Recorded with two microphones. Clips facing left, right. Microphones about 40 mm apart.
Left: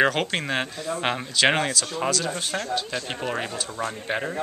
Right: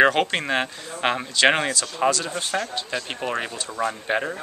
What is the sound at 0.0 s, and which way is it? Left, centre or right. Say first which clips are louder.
Speech: right 4 dB; centre.